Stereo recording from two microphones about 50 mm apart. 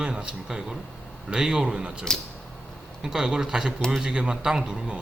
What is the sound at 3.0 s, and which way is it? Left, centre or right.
Speech, centre.